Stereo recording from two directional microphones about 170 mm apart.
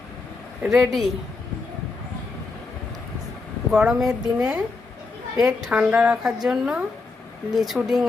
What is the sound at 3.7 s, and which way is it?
A woman's voice, 5° right (ahead or behind).